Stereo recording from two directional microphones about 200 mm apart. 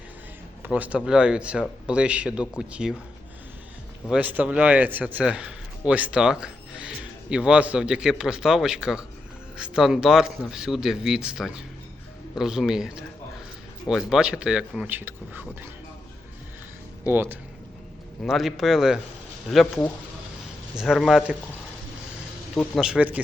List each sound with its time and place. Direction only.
0.6 s speech: 5° right (ahead or behind)
4.1 s speech: 10° right (ahead or behind)
17.1 s speech: 10° right (ahead or behind)
22.5 s speech: centre (ahead or behind)